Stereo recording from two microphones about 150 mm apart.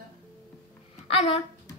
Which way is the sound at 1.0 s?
40° left (ahead or behind).